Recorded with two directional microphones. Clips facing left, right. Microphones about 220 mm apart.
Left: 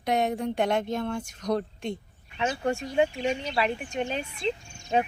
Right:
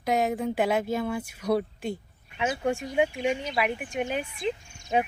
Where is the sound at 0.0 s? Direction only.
Centre (ahead or behind).